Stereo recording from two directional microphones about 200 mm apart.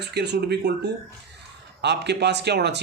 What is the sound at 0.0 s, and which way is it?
Speech, 55° right (ahead or behind).